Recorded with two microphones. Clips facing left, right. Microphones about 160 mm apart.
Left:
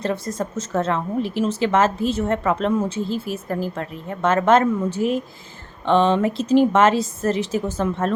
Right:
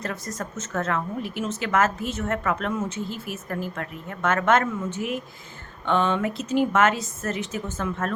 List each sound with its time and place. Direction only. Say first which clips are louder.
0.0 s a woman's voice: left 7 dB; 30° left (ahead or behind)